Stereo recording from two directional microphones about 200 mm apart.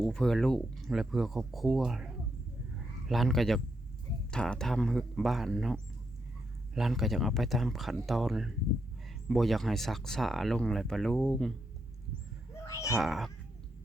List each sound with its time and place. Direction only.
0.0 s speech: 5° left (ahead or behind)
3.1 s speech: centre (ahead or behind)
12.6 s a sound: 15° left (ahead or behind)
13.0 s speech: centre (ahead or behind)